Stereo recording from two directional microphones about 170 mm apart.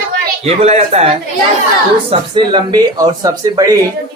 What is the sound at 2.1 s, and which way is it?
Speech, 25° right (ahead or behind).